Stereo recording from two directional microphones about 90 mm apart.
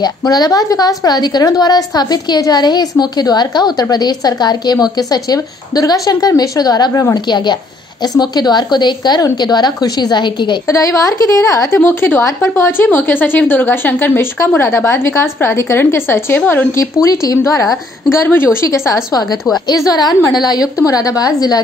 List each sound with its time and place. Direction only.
0.0 s a woman's voice: 45° left (ahead or behind)
7.2 s a woman's voice: 55° left (ahead or behind)
10.7 s speech: 35° left (ahead or behind)
11.7 s a woman's voice: 25° left (ahead or behind)
16.7 s a woman's voice: 35° left (ahead or behind)
18.7 s a woman's voice: 40° left (ahead or behind)